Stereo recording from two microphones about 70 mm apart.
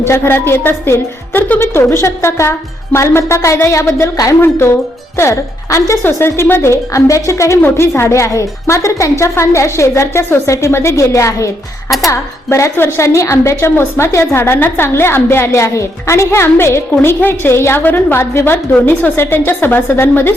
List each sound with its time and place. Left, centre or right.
0.0 s a woman's voice: left
6.0 s a woman's voice: left